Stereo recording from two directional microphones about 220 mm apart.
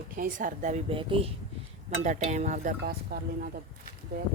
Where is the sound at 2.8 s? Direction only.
45° right (ahead or behind).